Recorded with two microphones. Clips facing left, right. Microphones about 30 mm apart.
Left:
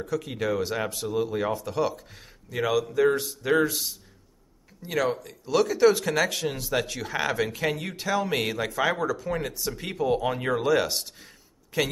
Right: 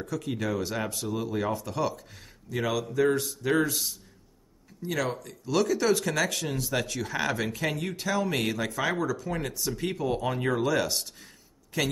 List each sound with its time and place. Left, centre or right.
0.0 s speech: centre
5.1 s speech: centre
9.6 s speech: centre